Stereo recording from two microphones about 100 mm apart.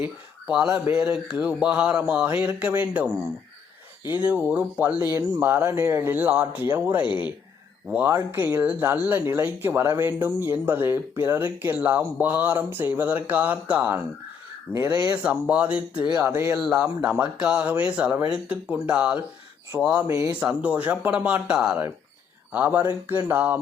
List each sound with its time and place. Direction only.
0.0 s speech: 10° right (ahead or behind)
4.1 s speech: 15° right (ahead or behind)
16.2 s speech: 25° right (ahead or behind)
20.1 s speech: 30° right (ahead or behind)
20.4 s speech: 10° right (ahead or behind)
22.8 s speech: 20° right (ahead or behind)